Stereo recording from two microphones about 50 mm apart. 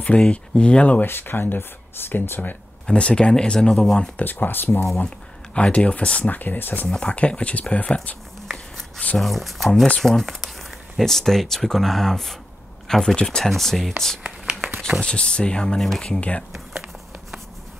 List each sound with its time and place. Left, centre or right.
0.0 s speech: left
1.0 s speech: left
2.9 s speech: left
4.2 s speech: left
5.0 s speech: left
6.9 s speech: left
8.5 s a sound: centre
9.2 s speech: centre
9.9 s speech: centre
14.2 s a sound: centre
15.0 s speech: centre